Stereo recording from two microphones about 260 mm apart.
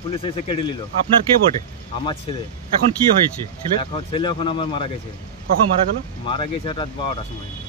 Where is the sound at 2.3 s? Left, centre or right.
Left.